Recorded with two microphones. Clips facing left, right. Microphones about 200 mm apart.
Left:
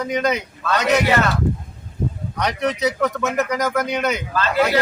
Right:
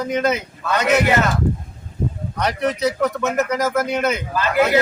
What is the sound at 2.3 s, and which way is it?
Speech, centre (ahead or behind).